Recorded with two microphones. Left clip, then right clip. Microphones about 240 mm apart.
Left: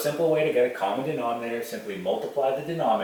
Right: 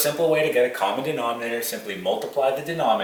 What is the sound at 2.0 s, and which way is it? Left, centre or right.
Speech, left.